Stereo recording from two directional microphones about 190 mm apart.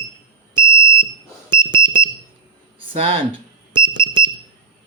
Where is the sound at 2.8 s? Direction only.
30° right (ahead or behind).